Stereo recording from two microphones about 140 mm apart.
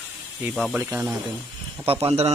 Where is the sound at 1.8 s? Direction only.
40° right (ahead or behind).